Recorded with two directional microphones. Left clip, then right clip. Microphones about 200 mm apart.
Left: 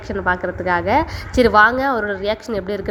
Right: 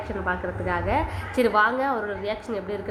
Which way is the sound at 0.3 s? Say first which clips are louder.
Left 9 dB; 40° left (ahead or behind).